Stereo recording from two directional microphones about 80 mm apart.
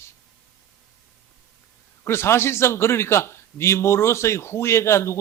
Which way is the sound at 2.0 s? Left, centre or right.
Left.